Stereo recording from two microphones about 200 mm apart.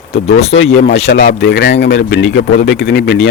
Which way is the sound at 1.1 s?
55° left (ahead or behind).